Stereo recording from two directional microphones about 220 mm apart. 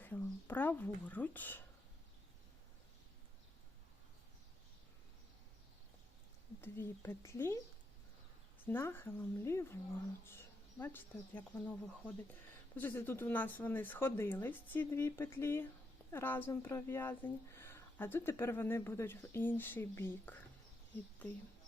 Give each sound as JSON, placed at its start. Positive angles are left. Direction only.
{"t": 0.0, "sound": "speech", "side_deg": 10}
{"t": 6.6, "sound": "a woman's voice", "side_deg": 10}
{"t": 8.6, "sound": "a woman's voice", "side_deg": 10}